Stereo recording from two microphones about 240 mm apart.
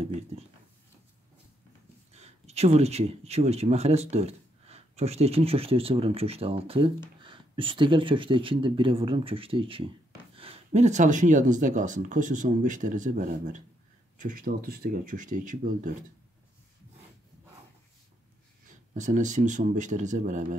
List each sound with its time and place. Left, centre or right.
2.1 s speech: right
18.9 s speech: right